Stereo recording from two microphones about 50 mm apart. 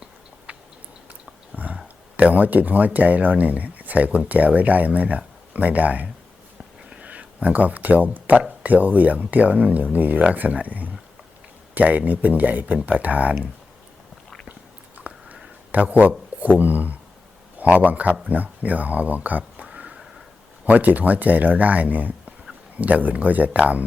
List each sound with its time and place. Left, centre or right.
0.5 s chewing: right
1.5 s speech: right
14.9 s a sound: right
15.7 s a man's voice: right
19.6 s a sound: right
20.7 s speech: right